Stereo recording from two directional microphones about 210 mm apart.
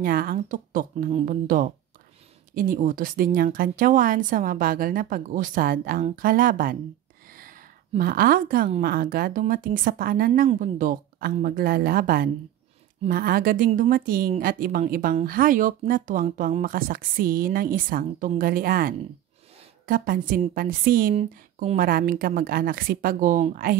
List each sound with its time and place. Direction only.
0.0 s a woman's voice: 45° right (ahead or behind)
7.2 s a sound: 40° right (ahead or behind)
8.0 s a woman's voice: 45° right (ahead or behind)
21.1 s a woman's voice: 30° right (ahead or behind)